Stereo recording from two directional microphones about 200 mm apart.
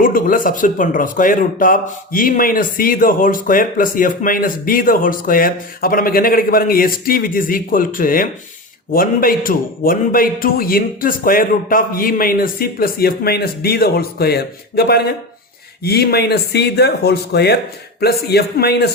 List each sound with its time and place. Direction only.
0.0 s speech: 45° left (ahead or behind)